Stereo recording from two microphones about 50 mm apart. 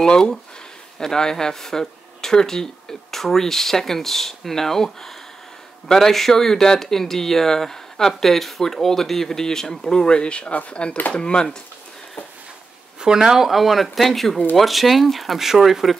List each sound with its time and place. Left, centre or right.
0.0 s speech: centre
13.0 s speech: centre